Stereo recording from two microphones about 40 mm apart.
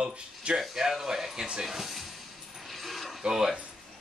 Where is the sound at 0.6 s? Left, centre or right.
Centre.